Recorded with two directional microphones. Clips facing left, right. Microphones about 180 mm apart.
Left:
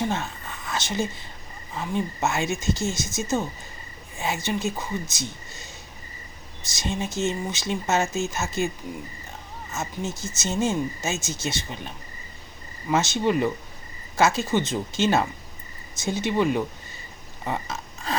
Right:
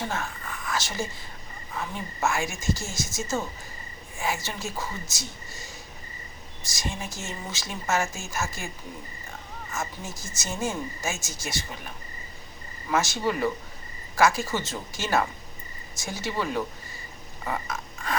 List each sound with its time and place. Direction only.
0.0 s whispering: 20° left (ahead or behind)
1.7 s speech: 20° left (ahead or behind)
6.7 s speech: 20° left (ahead or behind)
9.7 s speech: 20° left (ahead or behind)
12.9 s speech: 20° left (ahead or behind)
17.4 s pig: 25° left (ahead or behind)